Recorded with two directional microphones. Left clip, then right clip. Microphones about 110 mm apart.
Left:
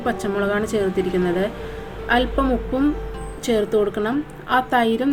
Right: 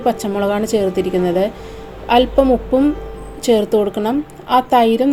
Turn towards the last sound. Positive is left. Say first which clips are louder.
# right 6 dB
turn(degrees=-35)  # may be behind; listen again after turning